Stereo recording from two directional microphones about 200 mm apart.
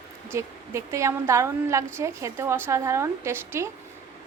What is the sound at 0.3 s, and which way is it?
A woman's voice, 15° right (ahead or behind).